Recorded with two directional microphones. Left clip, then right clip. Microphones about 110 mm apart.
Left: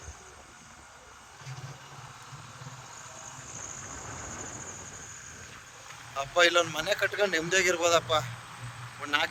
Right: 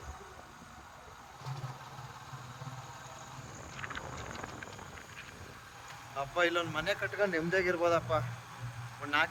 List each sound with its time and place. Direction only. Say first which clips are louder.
6.1 s speech: left 7 dB; 60° left (ahead or behind)
6.9 s speech: left 6 dB; 90° left